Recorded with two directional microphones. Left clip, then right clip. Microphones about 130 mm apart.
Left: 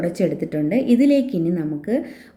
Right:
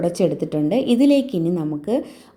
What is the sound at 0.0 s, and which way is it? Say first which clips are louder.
A woman's voice: right 2 dB; 20° right (ahead or behind).